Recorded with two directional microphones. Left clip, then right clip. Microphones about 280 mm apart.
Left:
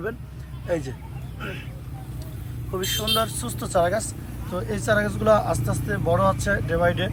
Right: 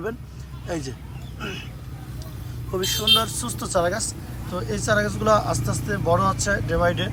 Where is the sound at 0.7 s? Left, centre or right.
Centre.